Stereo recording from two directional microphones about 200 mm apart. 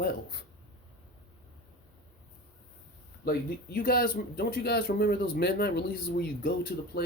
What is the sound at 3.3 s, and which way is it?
Speech, 50° left (ahead or behind).